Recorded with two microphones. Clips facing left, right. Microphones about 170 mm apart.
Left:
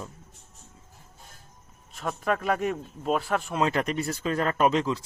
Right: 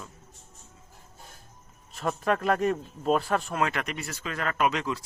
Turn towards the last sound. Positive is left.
turn(degrees=30)  # may be behind; listen again after turning